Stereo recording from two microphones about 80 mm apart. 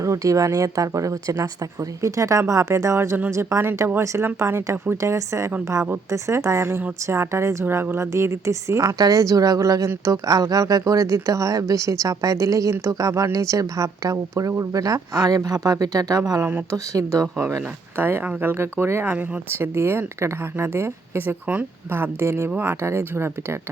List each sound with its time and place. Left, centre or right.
0.0 s speech: right
16.4 s speech: right
16.7 s speech: right